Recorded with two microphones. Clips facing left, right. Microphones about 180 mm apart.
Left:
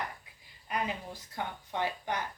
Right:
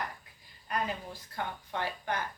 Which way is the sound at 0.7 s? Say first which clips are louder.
Even; 15° left (ahead or behind).